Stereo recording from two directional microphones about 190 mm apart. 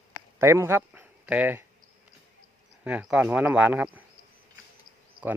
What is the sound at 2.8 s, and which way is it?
Speech, 5° right (ahead or behind).